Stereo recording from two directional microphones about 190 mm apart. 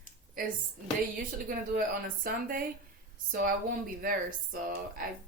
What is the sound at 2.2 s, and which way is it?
Speech, 50° right (ahead or behind).